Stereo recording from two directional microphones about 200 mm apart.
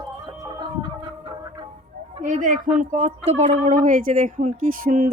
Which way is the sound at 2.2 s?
40° right (ahead or behind).